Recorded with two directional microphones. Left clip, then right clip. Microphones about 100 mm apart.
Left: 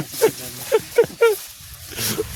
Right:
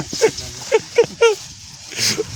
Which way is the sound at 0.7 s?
20° left (ahead or behind).